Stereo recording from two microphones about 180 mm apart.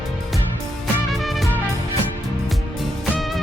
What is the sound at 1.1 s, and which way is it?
Music, centre (ahead or behind).